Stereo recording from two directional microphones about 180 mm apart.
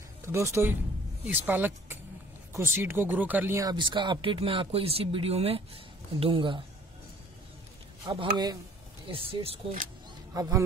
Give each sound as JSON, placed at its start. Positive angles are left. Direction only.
{"t": 0.2, "sound": "speech", "side_deg": -15}
{"t": 8.1, "sound": "speech", "side_deg": -20}
{"t": 10.3, "sound": "speech", "side_deg": -20}